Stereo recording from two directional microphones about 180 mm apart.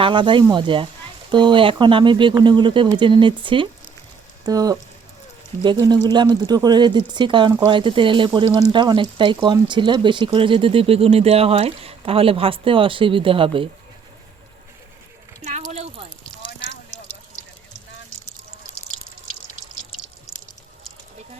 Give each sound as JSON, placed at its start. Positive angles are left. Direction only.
{"t": 0.0, "sound": "speech", "side_deg": -25}
{"t": 5.8, "sound": "speech", "side_deg": -25}
{"t": 15.4, "sound": "a sound", "side_deg": -40}